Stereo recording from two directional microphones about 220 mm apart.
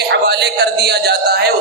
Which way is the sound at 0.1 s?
50° right (ahead or behind).